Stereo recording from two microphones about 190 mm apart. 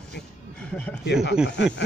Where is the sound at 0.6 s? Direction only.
5° left (ahead or behind).